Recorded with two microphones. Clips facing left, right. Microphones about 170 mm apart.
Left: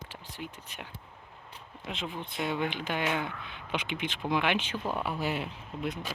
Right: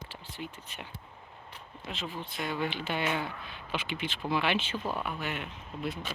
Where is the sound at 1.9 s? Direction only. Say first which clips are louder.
Left 1 dB; 20° left (ahead or behind).